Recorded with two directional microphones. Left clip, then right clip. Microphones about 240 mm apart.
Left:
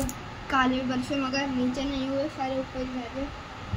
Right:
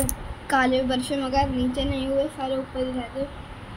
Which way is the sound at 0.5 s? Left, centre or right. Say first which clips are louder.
Right 4 dB; centre.